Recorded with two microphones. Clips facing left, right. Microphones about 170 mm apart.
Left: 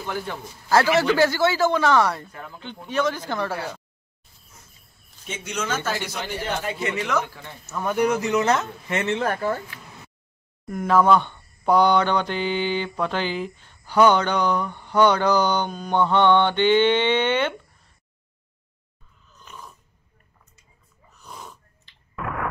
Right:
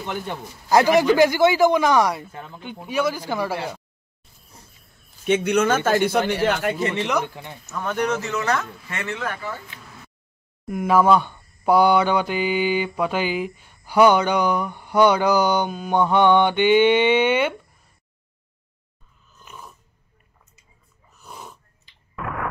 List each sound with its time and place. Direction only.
0.0 s mantra: 20° right (ahead or behind)
5.2 s speech: 65° right (ahead or behind); by 6.7 s 85° right
6.8 s speech: 35° right (ahead or behind)
7.1 s mantra: 15° right (ahead or behind)
7.7 s a man's voice: 10° left (ahead or behind); by 9.2 s 25° left (ahead or behind)
9.2 s speech: 45° left (ahead or behind)
10.7 s mantra: 10° right (ahead or behind)
19.3 s dog: 10° right (ahead or behind)
21.2 s a sound: 5° right (ahead or behind)